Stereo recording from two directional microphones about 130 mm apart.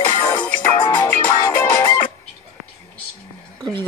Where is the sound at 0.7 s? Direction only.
35° left (ahead or behind).